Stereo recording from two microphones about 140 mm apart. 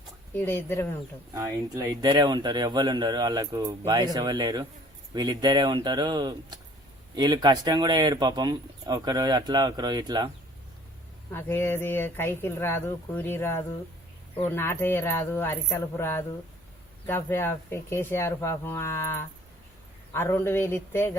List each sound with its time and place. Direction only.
0.3 s speech: 15° left (ahead or behind)
1.3 s speech: 25° right (ahead or behind)
11.3 s speech: 15° left (ahead or behind)